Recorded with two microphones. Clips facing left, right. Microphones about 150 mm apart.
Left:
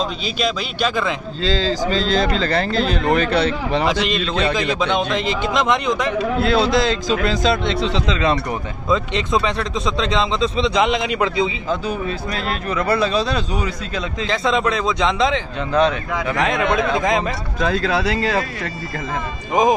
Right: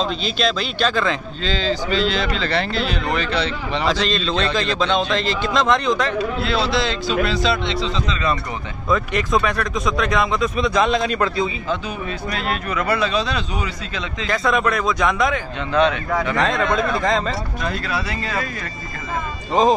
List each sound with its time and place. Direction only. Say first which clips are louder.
0.0 s a man's voice: right 1 dB; 10° left (ahead or behind)
1.4 s speech: left 4 dB; 35° left (ahead or behind)
3.8 s a man's voice: left 1 dB; 15° left (ahead or behind)
6.4 s a man's voice: left 6 dB; 45° left (ahead or behind)
7.8 s speech: left 3 dB; 80° left
8.8 s speech: even; 20° left (ahead or behind)
12.4 s speech: even; 35° left (ahead or behind)
14.2 s speech: even; 25° left (ahead or behind)
15.8 s a man's voice: right 1 dB; 10° left (ahead or behind)
17.6 s speech: left 7 dB; 90° left